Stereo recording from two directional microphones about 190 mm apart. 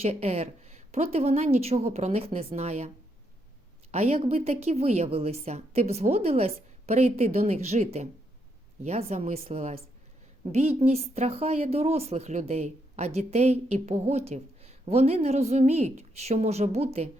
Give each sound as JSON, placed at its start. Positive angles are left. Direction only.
{"t": 0.0, "sound": "a woman's voice", "side_deg": -35}
{"t": 3.9, "sound": "a woman's voice", "side_deg": -35}